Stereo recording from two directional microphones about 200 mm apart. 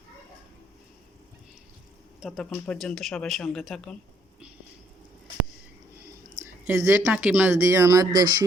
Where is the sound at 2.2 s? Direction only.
Centre (ahead or behind).